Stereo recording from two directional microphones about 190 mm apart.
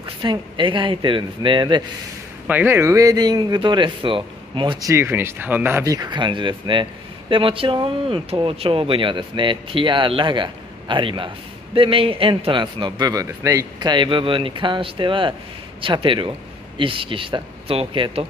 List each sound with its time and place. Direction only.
0.0 s a man's voice: 25° right (ahead or behind)
2.4 s a man's voice: 10° right (ahead or behind); by 18.2 s 30° right (ahead or behind)